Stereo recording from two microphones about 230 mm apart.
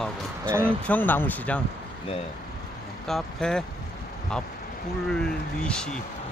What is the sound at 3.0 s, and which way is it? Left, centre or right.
Speech, centre.